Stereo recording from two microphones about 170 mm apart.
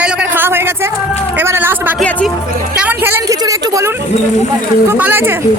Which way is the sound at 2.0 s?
5° left (ahead or behind).